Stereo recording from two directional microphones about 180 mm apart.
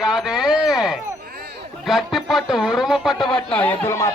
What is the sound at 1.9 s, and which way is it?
Music, centre (ahead or behind).